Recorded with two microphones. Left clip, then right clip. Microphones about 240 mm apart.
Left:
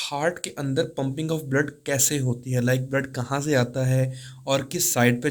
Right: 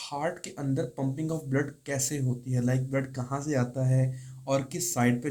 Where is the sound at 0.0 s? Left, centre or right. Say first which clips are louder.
Left 7 dB; left.